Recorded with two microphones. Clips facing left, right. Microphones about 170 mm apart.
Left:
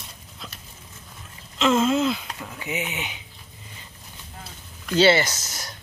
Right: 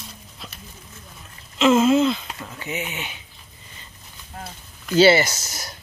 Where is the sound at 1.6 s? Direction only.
5° right (ahead or behind); by 3.2 s 15° left (ahead or behind).